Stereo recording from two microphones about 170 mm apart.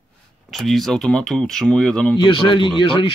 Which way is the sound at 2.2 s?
30° left (ahead or behind).